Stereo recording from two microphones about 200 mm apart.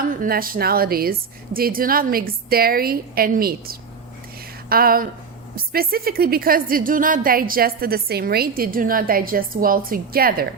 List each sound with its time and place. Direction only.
0.1 s a woman's voice: 45° right (ahead or behind)